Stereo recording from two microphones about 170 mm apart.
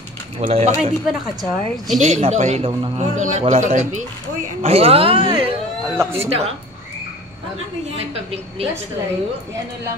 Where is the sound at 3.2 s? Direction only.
45° right (ahead or behind).